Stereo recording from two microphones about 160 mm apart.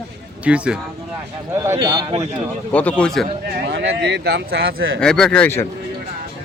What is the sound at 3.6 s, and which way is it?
A man's voice, 80° right.